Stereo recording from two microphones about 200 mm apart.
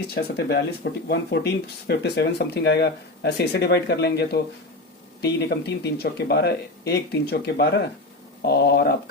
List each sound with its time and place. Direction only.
0.1 s speech: 50° left (ahead or behind)